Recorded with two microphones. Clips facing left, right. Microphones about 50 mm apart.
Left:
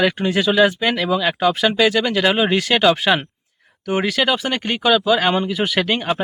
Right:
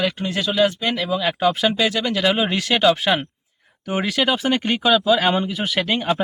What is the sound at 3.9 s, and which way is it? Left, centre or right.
Speech, centre.